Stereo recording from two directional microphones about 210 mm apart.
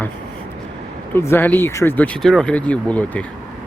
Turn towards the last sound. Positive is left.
turn(degrees=5)  # may be behind; listen again after turning